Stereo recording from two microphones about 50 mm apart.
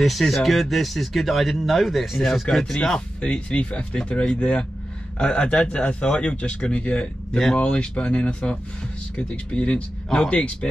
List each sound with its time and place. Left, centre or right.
0.0 s speech: centre
3.2 s speech: left
10.3 s speech: left